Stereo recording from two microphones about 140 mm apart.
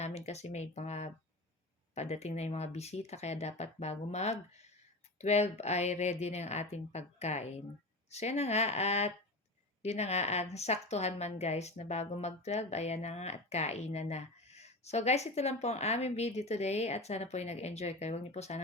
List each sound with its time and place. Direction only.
0.0 s a woman's voice: 50° left (ahead or behind)